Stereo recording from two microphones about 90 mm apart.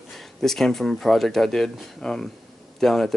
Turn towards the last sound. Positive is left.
turn(degrees=5)  # may be behind; listen again after turning